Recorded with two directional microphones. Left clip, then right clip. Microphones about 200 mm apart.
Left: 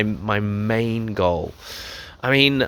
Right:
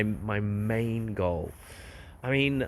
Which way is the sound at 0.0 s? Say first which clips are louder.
Left 9 dB; 30° left (ahead or behind).